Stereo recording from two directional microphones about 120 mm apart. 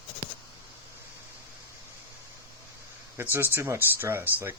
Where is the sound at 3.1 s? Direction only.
15° right (ahead or behind).